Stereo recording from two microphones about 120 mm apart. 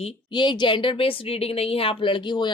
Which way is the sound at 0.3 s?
40° left (ahead or behind).